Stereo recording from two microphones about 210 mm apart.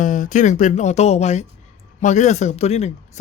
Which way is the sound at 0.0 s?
35° left (ahead or behind).